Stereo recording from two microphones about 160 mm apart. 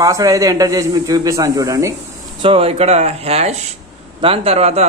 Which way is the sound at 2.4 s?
35° right (ahead or behind).